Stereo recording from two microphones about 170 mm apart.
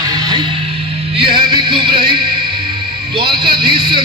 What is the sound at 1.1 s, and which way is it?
Music, 30° right (ahead or behind).